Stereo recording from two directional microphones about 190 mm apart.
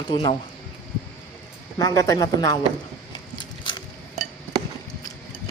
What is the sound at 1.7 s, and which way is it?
Speech, 20° left (ahead or behind).